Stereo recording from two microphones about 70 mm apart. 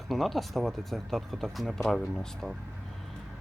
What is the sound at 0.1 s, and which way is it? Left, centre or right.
Speech, centre.